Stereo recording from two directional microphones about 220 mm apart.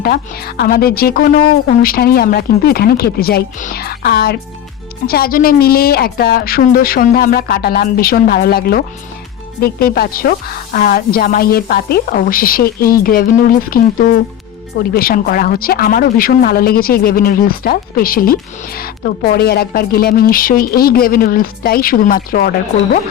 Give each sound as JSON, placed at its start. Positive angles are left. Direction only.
{"t": 0.0, "sound": "a woman's voice", "side_deg": 45}